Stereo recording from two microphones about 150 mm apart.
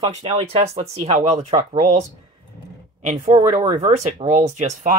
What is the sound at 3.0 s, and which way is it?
Speech, 50° right (ahead or behind).